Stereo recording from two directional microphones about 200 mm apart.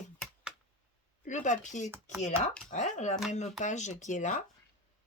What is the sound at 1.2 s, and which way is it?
Speech, 35° left (ahead or behind).